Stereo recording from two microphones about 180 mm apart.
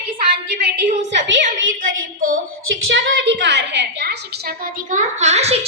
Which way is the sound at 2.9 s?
90° right.